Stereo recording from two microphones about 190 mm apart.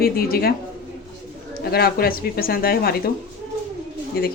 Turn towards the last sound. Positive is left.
turn(degrees=55)  # may be behind; listen again after turning